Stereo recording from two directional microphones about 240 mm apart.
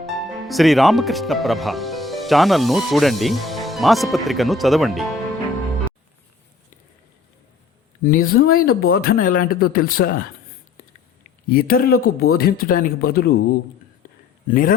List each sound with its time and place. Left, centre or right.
0.0 s speech: centre
8.0 s speech: left
11.4 s speech: left
11.9 s speech: left
12.3 s speech: left
14.4 s speech: left